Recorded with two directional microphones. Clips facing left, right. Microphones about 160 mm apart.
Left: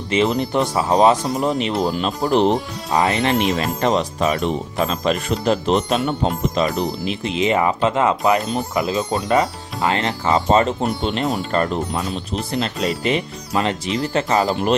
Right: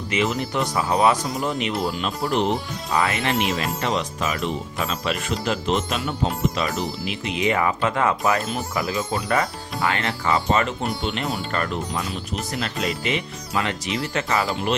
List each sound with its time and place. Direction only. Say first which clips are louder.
0.1 s speech: left 6 dB; 30° left (ahead or behind)